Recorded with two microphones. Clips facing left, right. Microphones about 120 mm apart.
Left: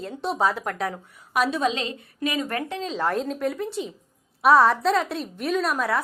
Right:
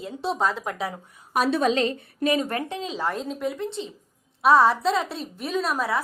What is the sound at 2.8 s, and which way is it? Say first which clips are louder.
A woman's voice: left 3 dB; 5° right (ahead or behind).